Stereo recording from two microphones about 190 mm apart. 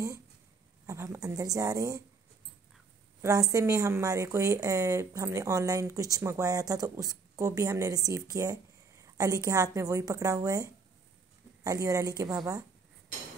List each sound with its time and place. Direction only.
0.8 s speech: 15° right (ahead or behind)
3.2 s speech: 15° right (ahead or behind)